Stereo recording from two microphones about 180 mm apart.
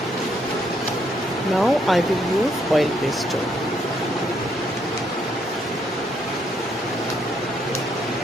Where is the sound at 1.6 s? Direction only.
Centre (ahead or behind).